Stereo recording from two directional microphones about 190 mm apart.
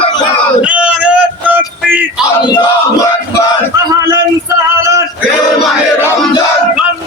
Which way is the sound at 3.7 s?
20° right (ahead or behind).